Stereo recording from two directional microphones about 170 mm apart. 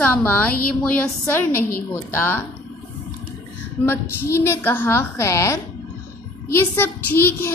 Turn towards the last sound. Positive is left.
turn(degrees=10)  # may be behind; listen again after turning